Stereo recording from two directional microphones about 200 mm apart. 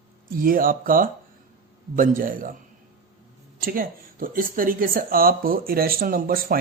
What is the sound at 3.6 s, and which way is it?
Speech, 45° right (ahead or behind).